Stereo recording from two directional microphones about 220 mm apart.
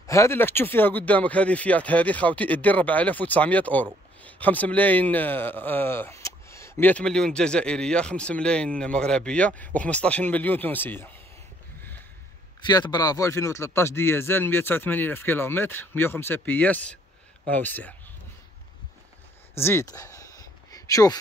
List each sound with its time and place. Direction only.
0.0 s speech: 15° left (ahead or behind)
12.6 s speech: 20° left (ahead or behind)
19.5 s speech: 10° left (ahead or behind)
20.7 s a sound: 15° left (ahead or behind)